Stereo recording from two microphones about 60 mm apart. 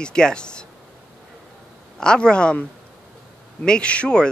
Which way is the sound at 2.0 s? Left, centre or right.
Centre.